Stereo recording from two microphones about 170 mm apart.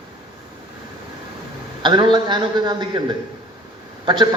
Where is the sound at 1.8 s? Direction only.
30° right (ahead or behind).